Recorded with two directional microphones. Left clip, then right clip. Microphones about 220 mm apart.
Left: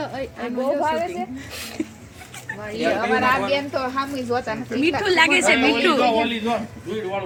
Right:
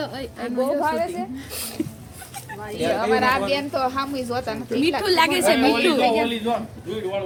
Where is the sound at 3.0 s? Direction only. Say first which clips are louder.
Even; 15° left (ahead or behind).